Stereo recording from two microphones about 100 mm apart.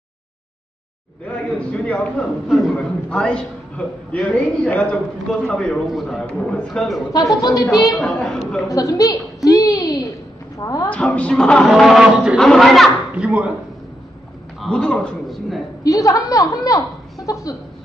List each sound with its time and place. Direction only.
1.2 s a man's voice: 15° left (ahead or behind)
2.4 s a man's voice: centre (ahead or behind)
2.7 s a man's voice: 10° left (ahead or behind)
7.4 s a woman's voice: 35° left (ahead or behind)
8.0 s a man's voice: 10° left (ahead or behind)
8.6 s a sound: 35° left (ahead or behind)
10.6 s a woman's voice: 35° left (ahead or behind)
10.9 s a man's voice: 15° left (ahead or behind)
12.9 s a woman's voice: 15° right (ahead or behind)
14.6 s a man's voice: 5° left (ahead or behind)
15.8 s a woman's voice: 35° left (ahead or behind)